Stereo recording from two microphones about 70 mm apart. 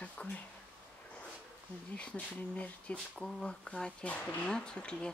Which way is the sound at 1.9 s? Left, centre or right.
Centre.